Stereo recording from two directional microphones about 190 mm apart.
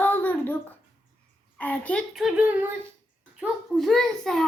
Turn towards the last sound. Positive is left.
turn(degrees=5)  # may be behind; listen again after turning